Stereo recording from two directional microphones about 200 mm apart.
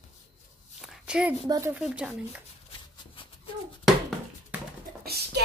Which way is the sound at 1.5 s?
10° right (ahead or behind).